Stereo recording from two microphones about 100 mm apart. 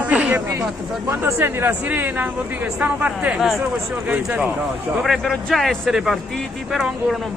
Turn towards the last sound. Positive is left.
turn(degrees=0)  # may be behind; listen again after turning